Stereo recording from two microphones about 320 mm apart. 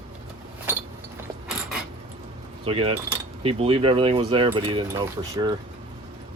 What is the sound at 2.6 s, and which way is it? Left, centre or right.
Speech, centre.